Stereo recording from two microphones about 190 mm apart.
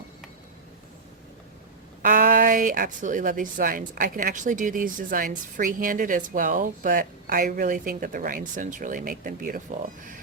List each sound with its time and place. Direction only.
2.0 s speech: 45° right (ahead or behind)